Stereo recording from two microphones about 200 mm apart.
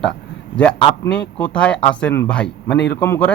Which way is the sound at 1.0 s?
5° left (ahead or behind).